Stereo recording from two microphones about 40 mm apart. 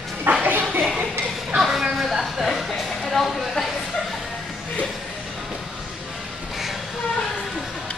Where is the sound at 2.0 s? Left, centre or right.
Centre.